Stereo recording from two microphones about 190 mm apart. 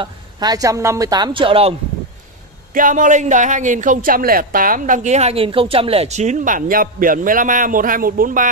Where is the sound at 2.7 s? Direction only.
45° right (ahead or behind).